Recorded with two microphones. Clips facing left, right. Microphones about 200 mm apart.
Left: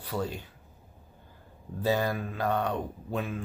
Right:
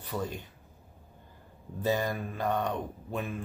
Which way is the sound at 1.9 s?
15° right (ahead or behind).